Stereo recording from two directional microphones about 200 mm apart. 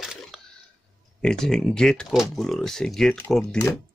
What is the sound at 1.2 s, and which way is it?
Speech, 5° left (ahead or behind).